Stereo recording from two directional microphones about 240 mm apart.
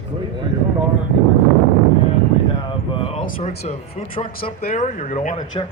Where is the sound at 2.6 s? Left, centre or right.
Left.